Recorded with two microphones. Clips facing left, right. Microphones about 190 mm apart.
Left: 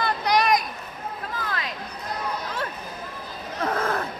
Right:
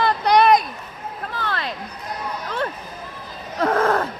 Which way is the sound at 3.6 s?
55° right (ahead or behind).